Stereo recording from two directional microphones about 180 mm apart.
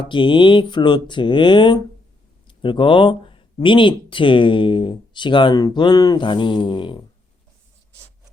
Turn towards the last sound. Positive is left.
turn(degrees=30)  # may be behind; listen again after turning